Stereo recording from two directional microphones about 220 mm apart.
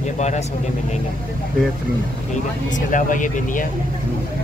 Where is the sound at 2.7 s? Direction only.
35° left (ahead or behind).